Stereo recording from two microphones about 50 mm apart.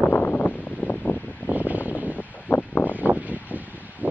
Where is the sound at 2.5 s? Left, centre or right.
Left.